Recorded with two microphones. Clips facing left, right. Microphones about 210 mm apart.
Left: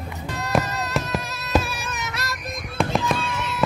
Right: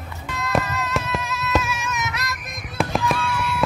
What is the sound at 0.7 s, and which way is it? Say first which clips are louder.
Music: right 1 dB; 35° left (ahead or behind).